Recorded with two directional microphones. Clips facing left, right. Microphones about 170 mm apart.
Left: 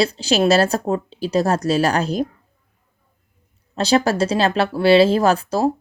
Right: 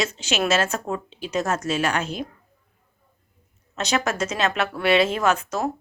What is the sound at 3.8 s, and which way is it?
Speech, 30° left (ahead or behind).